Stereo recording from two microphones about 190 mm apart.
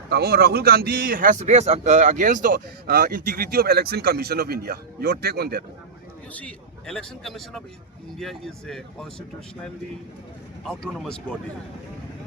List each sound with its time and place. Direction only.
0.1 s a man's voice: 55° right (ahead or behind)
6.3 s a man's voice: 5° left (ahead or behind)
10.6 s a man's voice: centre (ahead or behind)